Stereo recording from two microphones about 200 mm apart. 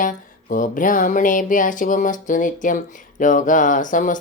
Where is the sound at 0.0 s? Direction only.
40° left (ahead or behind).